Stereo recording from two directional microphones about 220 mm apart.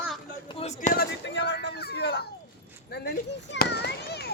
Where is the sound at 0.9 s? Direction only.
50° left (ahead or behind).